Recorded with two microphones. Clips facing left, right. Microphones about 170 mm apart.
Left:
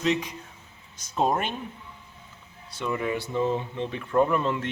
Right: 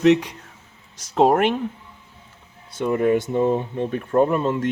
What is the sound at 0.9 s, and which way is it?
Speech, 85° right.